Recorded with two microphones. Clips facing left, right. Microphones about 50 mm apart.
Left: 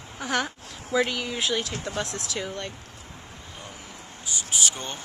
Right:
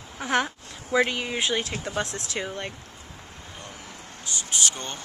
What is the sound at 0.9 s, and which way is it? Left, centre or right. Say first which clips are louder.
Speech: right 2 dB; centre.